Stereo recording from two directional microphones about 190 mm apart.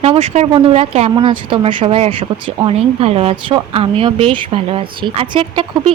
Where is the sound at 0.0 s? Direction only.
35° right (ahead or behind).